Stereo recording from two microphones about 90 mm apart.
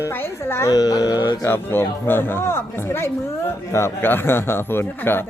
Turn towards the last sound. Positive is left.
turn(degrees=25)  # may be behind; listen again after turning